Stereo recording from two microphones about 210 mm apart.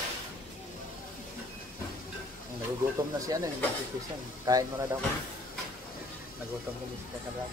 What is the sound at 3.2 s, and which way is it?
Speech, 15° right (ahead or behind).